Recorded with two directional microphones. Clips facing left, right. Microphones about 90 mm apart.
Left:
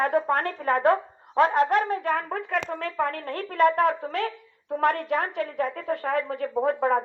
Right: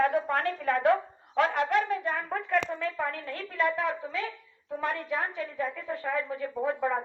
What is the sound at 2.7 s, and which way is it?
A woman's voice, 65° left (ahead or behind).